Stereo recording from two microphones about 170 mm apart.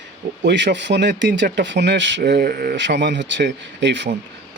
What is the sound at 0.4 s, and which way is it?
Speech, 90° right.